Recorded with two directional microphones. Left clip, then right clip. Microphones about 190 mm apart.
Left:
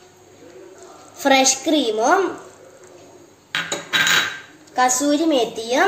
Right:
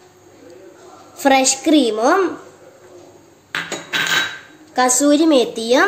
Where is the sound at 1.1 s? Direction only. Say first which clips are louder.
Right 1 dB; 50° right (ahead or behind).